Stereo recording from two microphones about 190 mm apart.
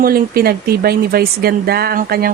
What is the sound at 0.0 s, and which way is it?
A woman's voice, 50° right (ahead or behind).